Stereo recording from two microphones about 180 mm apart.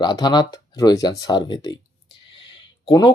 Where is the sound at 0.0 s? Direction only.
25° left (ahead or behind).